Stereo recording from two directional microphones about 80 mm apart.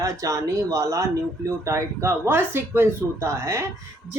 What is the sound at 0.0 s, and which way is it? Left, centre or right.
Speech, right.